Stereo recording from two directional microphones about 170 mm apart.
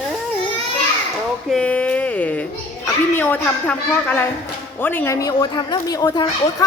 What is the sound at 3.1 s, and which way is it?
Speech, 10° left (ahead or behind).